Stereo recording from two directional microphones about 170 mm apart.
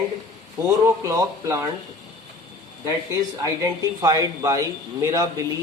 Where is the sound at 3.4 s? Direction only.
20° right (ahead or behind).